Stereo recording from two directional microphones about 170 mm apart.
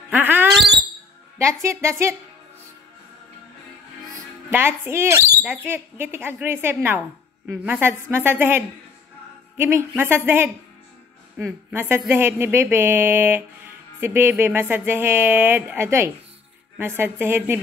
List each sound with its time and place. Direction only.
0.1 s a sound: 10° right (ahead or behind)
1.4 s speech: 15° right (ahead or behind)
4.1 s speech: 15° right (ahead or behind)